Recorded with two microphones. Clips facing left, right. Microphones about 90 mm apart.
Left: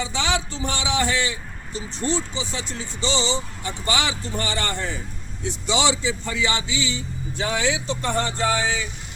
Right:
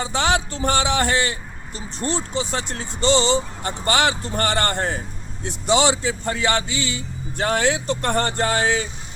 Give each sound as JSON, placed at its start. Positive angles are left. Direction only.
{"t": 0.0, "sound": "speech", "side_deg": -50}